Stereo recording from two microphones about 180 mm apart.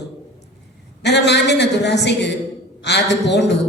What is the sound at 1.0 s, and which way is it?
A man's voice, 70° left (ahead or behind).